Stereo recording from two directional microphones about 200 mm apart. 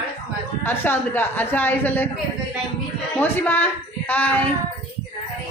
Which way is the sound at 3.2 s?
10° left (ahead or behind).